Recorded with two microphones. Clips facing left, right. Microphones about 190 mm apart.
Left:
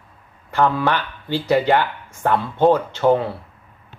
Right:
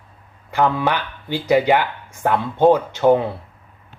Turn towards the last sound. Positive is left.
turn(degrees=-15)  # may be behind; listen again after turning